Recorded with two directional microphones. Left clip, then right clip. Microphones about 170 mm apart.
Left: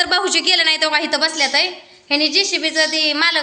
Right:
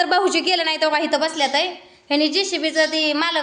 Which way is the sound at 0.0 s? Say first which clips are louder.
Left 1 dB; 45° right (ahead or behind).